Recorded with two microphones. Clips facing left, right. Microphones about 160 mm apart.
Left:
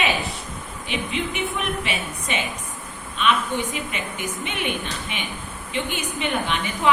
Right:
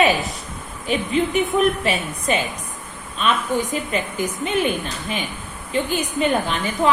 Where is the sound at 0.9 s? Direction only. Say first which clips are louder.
Right 7 dB; 40° right (ahead or behind).